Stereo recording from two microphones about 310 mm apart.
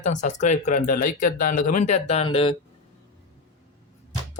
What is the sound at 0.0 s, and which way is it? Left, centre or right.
Speech, left.